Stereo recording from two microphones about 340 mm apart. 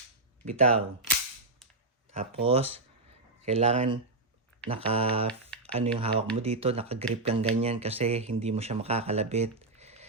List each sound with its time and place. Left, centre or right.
0.4 s speech: centre
2.1 s speech: centre
5.3 s typing: centre
5.7 s speech: centre